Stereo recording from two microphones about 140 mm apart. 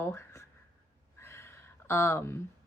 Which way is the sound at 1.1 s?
20° left (ahead or behind).